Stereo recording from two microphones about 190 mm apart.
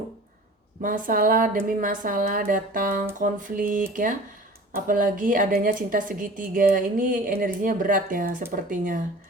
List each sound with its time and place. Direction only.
0.8 s a woman's voice: 45° right (ahead or behind)